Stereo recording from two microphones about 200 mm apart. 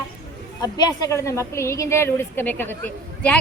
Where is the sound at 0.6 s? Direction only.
20° left (ahead or behind).